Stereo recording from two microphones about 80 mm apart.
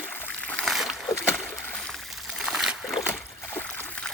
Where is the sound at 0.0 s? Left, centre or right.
Centre.